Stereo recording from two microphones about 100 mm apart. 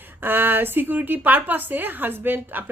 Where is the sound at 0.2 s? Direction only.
20° right (ahead or behind).